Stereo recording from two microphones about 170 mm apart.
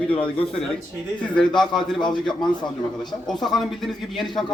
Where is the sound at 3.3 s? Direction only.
Centre (ahead or behind).